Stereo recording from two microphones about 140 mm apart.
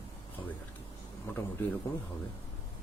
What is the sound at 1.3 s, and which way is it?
Speech, 15° left (ahead or behind).